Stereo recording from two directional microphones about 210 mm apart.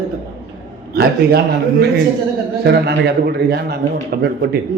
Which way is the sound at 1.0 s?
50° right (ahead or behind).